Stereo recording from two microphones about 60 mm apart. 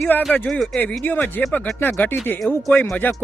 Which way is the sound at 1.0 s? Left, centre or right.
Left.